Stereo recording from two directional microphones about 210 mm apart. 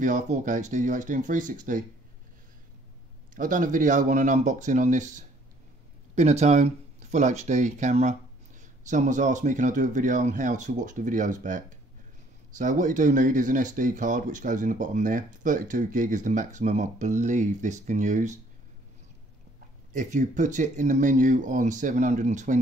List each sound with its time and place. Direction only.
0.0 s speech: 35° right (ahead or behind)
3.3 s speech: 40° right (ahead or behind)
19.9 s speech: 35° right (ahead or behind)